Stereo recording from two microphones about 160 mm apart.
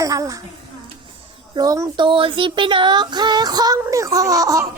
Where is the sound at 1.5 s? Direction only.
20° right (ahead or behind).